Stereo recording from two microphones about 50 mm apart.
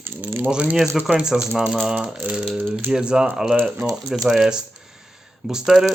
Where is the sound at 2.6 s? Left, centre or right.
Right.